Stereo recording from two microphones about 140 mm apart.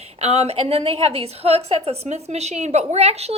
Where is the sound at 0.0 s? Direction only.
50° right (ahead or behind).